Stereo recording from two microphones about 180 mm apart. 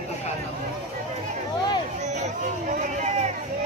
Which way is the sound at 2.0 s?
40° right (ahead or behind).